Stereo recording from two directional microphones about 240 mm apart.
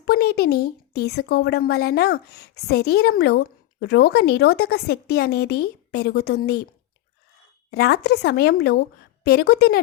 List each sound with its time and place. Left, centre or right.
0.0 s speech: left
7.7 s speech: left